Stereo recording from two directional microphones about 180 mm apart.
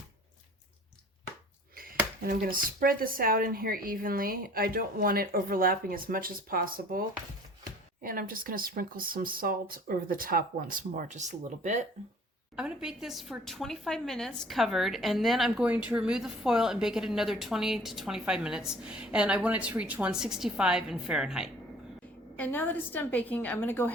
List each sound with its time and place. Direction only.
1.7 s a sound: 55° right (ahead or behind)
2.2 s speech: 55° right (ahead or behind)
8.0 s speech: 50° right (ahead or behind)
12.5 s a woman's voice: 5° right (ahead or behind)
22.4 s a woman's voice: 10° left (ahead or behind)